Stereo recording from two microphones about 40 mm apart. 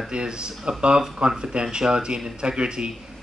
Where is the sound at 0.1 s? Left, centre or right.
Right.